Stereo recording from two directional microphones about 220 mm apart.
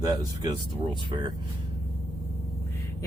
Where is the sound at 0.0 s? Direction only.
15° right (ahead or behind).